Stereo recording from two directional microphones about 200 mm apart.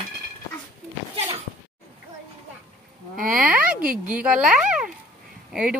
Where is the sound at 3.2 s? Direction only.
45° right (ahead or behind).